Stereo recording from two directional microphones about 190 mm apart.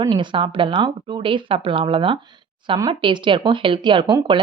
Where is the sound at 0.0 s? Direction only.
25° right (ahead or behind).